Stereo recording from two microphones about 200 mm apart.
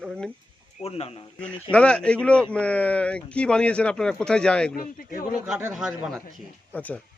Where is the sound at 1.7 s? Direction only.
5° left (ahead or behind).